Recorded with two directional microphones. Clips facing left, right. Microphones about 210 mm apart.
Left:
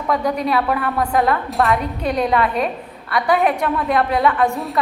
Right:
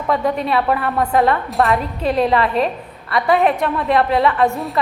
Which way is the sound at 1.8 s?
30° right (ahead or behind).